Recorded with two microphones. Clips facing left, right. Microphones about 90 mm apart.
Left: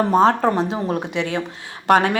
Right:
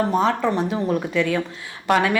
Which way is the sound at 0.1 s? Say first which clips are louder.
Left 4 dB; 40° left (ahead or behind).